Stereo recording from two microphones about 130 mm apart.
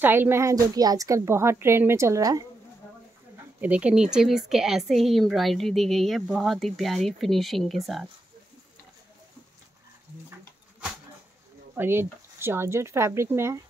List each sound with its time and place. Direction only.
0.0 s a woman's voice: 15° right (ahead or behind)
3.6 s speech: 10° right (ahead or behind)
11.7 s a woman's voice: 15° right (ahead or behind)